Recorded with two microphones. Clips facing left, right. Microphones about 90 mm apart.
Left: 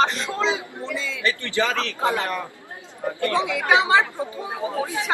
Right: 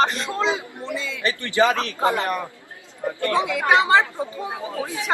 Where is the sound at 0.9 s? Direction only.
5° right (ahead or behind).